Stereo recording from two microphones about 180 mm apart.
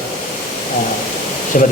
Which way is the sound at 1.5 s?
45° left (ahead or behind).